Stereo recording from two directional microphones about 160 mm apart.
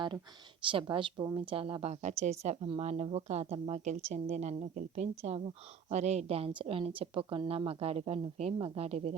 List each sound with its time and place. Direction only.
0.6 s a woman's voice: 30° right (ahead or behind)